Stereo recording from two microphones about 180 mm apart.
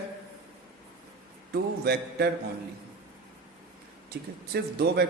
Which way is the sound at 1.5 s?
60° right (ahead or behind).